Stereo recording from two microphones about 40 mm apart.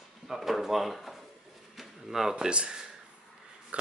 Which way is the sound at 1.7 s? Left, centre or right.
Centre.